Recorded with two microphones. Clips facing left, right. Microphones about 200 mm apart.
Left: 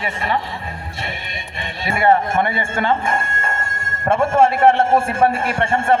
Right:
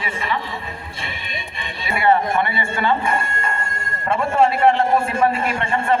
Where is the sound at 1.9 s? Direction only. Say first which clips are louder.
Left 1 dB; 45° left (ahead or behind).